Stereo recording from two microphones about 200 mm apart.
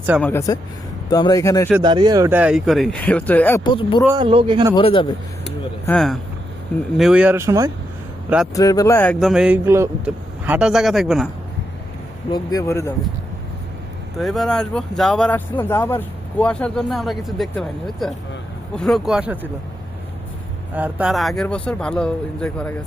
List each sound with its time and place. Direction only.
0.2 s speech: 10° left (ahead or behind)
1.8 s speech: 20° right (ahead or behind); by 3.6 s 10° left (ahead or behind)
3.6 s speech: 25° left (ahead or behind)
4.0 s speech: 20° right (ahead or behind)
4.7 s speech: 25° left (ahead or behind)
5.8 s speech: 5° left (ahead or behind); by 7.7 s 15° right (ahead or behind)
8.5 s speech: 15° left (ahead or behind)
9.1 s speech: centre (ahead or behind)
12.3 s speech: 20° left (ahead or behind)
14.2 s speech: centre (ahead or behind)
20.7 s speech: 5° right (ahead or behind)